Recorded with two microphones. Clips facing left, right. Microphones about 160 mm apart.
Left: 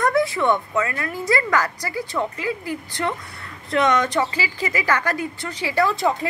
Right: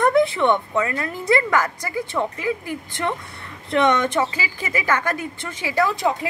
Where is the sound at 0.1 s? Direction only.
20° right (ahead or behind).